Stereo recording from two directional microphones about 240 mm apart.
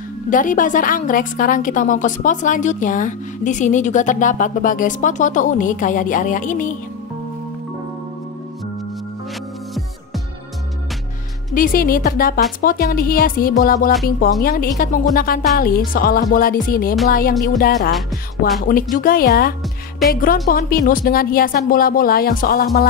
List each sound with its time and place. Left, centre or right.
0.3 s a woman's voice: left
11.5 s a woman's voice: left